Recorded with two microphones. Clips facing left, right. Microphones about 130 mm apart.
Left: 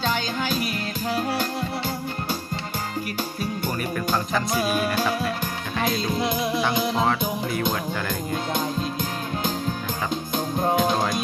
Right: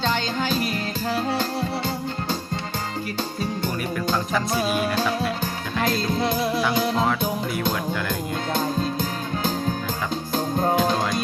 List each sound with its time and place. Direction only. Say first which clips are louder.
0.0 s music: right 1 dB; 5° left (ahead or behind)
3.9 s music: right 1 dB; 5° left (ahead or behind)
5.8 s music: right 1 dB; centre (ahead or behind)
6.1 s music: right 1 dB; 30° right (ahead or behind)
10.6 s music: even; 5° left (ahead or behind)